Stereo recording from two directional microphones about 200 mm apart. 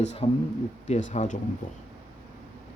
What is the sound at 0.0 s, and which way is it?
A woman's voice, 35° left (ahead or behind).